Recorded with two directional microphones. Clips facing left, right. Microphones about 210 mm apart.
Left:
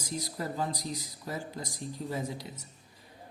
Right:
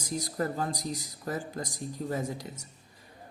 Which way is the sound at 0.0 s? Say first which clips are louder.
Right 4 dB; 50° right (ahead or behind).